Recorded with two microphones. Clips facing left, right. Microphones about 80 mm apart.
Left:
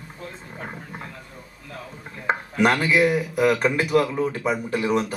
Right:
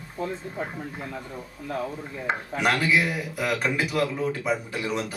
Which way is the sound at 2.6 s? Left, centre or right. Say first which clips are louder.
Left 4 dB; left.